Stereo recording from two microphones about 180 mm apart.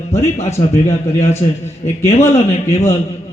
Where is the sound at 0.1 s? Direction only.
40° left (ahead or behind).